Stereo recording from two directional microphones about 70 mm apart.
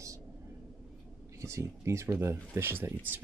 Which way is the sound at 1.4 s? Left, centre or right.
Right.